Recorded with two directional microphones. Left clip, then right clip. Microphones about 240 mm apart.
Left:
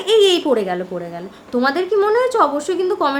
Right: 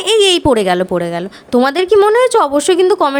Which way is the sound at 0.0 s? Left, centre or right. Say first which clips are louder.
Right 3 dB; right.